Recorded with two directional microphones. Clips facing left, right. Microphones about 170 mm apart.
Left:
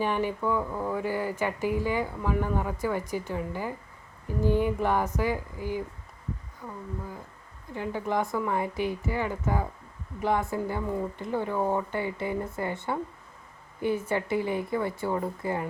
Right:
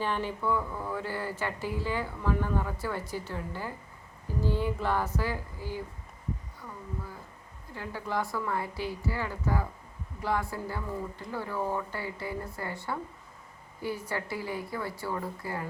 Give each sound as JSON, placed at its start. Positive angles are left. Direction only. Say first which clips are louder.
{"t": 0.0, "sound": "speech", "louder": "left 4 dB", "side_deg": 15}
{"t": 7.7, "sound": "speech", "louder": "left 5 dB", "side_deg": 20}
{"t": 14.1, "sound": "speech", "louder": "left 7 dB", "side_deg": 20}